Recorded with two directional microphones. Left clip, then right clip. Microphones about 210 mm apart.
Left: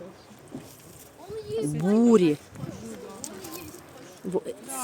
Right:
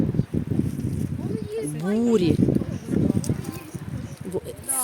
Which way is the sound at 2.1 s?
10° left (ahead or behind).